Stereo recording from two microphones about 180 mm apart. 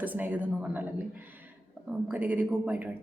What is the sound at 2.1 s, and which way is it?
Speech, 10° right (ahead or behind).